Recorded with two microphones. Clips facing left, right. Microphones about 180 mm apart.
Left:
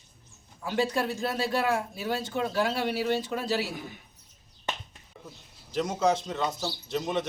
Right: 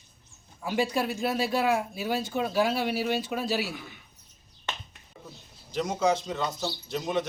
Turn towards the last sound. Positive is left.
turn(degrees=0)  # may be behind; listen again after turning